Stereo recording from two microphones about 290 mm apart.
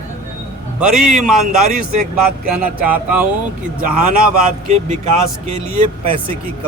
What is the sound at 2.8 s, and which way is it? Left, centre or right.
Speech, centre.